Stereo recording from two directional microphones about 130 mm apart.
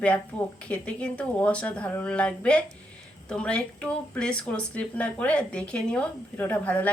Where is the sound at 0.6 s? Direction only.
10° left (ahead or behind).